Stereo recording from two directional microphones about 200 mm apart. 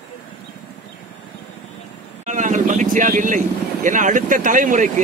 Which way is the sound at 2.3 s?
40° right (ahead or behind).